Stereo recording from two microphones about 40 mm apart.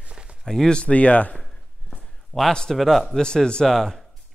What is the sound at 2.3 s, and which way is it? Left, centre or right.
Speech, left.